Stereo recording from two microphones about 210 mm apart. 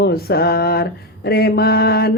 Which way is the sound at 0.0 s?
50° left (ahead or behind).